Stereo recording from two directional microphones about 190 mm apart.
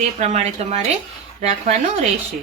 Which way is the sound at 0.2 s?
35° right (ahead or behind).